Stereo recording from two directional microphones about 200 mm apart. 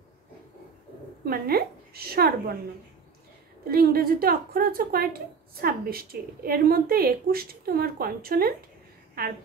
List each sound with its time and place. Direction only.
1.2 s a woman's voice: 50° right (ahead or behind)
3.6 s a woman's voice: 50° right (ahead or behind)